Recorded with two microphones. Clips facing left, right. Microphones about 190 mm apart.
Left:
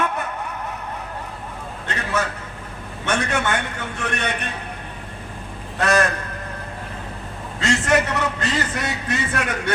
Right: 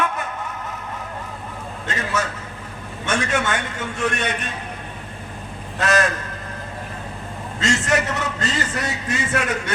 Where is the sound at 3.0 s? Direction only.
65° left (ahead or behind).